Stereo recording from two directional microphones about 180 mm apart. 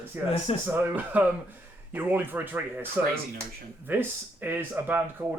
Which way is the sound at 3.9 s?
10° right (ahead or behind).